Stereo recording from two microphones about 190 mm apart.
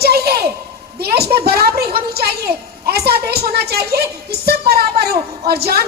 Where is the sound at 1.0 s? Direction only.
55° right (ahead or behind).